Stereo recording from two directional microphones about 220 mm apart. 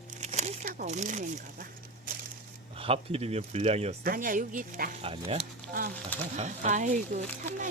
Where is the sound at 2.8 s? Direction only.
25° right (ahead or behind).